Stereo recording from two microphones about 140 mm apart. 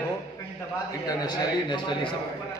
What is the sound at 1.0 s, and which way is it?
A man's voice, 30° left (ahead or behind).